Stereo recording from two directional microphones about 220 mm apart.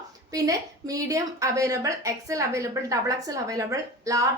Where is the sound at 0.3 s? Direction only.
15° right (ahead or behind).